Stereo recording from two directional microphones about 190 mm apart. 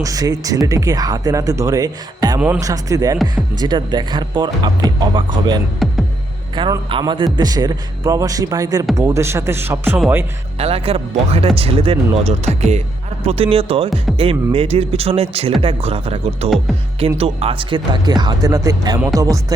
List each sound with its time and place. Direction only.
0.0 s a man's voice: 20° right (ahead or behind)
5.8 s music: centre (ahead or behind)
6.6 s a man's voice: 25° right (ahead or behind); by 10.2 s 10° right (ahead or behind)
10.6 s speech: 30° right (ahead or behind)